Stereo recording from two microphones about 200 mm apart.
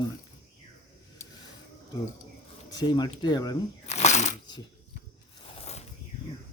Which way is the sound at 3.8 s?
35° left (ahead or behind).